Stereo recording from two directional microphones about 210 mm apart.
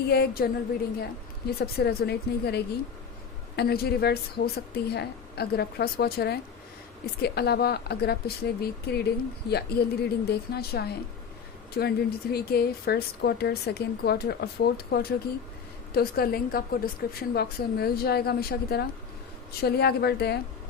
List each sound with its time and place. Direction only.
0.1 s speech: 45° left (ahead or behind)